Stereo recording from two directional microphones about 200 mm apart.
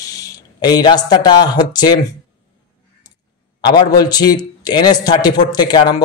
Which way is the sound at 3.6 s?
20° left (ahead or behind).